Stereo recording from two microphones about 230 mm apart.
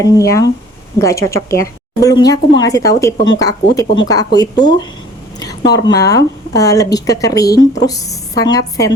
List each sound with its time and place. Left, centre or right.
0.0 s a woman's voice: centre